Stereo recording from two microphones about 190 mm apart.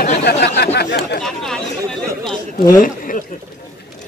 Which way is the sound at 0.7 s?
60° left (ahead or behind).